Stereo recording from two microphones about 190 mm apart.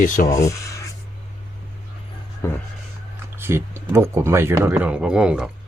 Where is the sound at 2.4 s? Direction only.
15° left (ahead or behind).